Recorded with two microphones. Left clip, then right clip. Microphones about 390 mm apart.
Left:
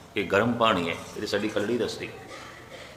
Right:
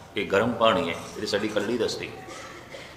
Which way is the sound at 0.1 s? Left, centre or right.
Centre.